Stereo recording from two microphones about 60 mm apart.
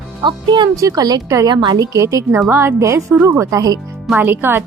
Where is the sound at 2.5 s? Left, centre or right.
Right.